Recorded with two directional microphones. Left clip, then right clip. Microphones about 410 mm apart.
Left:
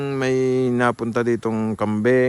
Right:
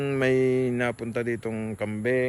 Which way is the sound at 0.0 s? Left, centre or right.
Centre.